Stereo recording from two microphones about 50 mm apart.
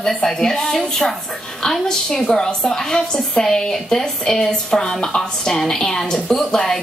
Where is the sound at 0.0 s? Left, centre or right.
Centre.